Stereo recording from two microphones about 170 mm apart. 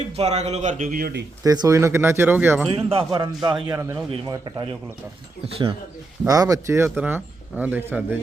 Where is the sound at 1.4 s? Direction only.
20° right (ahead or behind).